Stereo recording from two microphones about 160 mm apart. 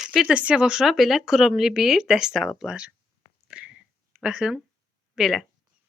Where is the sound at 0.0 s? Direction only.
Centre (ahead or behind).